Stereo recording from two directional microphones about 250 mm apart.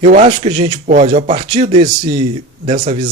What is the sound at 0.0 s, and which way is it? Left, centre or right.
Speech, right.